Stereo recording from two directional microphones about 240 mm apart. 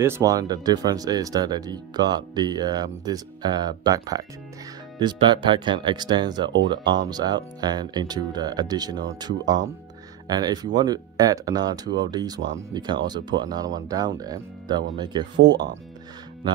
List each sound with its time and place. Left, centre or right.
0.0 s speech: centre